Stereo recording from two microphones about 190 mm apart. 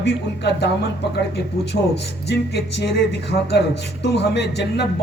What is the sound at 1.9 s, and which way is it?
Speech, 60° left (ahead or behind).